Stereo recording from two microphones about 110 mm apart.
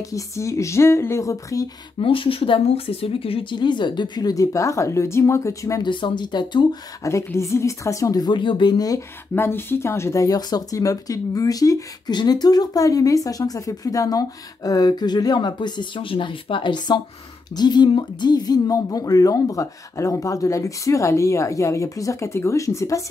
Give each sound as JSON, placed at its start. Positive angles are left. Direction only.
{"t": 0.0, "sound": "speech", "side_deg": 30}
{"t": 2.0, "sound": "speech", "side_deg": 55}
{"t": 5.9, "sound": "speech", "side_deg": 45}
{"t": 7.0, "sound": "speech", "side_deg": 30}
{"t": 9.3, "sound": "speech", "side_deg": 20}